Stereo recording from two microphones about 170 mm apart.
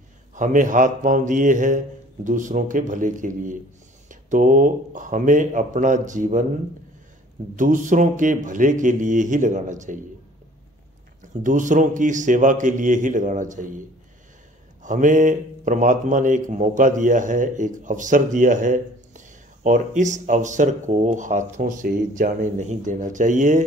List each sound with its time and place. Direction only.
0.3 s speech: 50° right (ahead or behind)
7.5 s speech: 50° right (ahead or behind)
11.4 s speech: 50° right (ahead or behind)
14.8 s speech: 50° right (ahead or behind)